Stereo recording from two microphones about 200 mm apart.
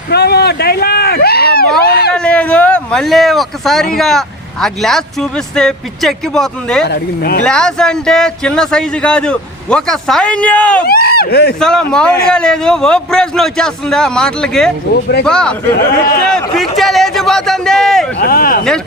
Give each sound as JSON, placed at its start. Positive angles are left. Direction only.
{"t": 0.1, "sound": "speech", "side_deg": 55}
{"t": 2.1, "sound": "speech", "side_deg": 5}
{"t": 6.8, "sound": "speech", "side_deg": 50}
{"t": 7.4, "sound": "speech", "side_deg": 5}
{"t": 10.8, "sound": "speech", "side_deg": 50}
{"t": 11.6, "sound": "speech", "side_deg": 5}
{"t": 15.7, "sound": "speech", "side_deg": 55}
{"t": 16.7, "sound": "speech", "side_deg": 0}
{"t": 18.2, "sound": "speech", "side_deg": 50}